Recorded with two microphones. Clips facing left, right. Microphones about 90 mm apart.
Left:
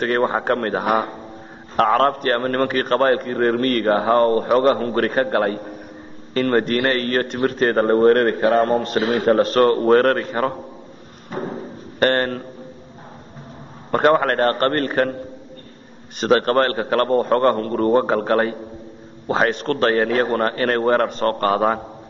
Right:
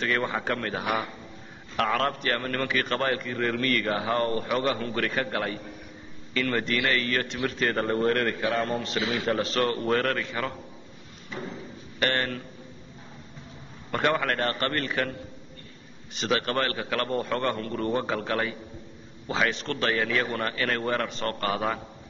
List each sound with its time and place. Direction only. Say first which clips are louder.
0.0 s a man's voice: left 8 dB; 45° left (ahead or behind)
11.2 s a sound: left 9 dB; 45° left (ahead or behind)
13.8 s a man's voice: left 9 dB; 45° left (ahead or behind)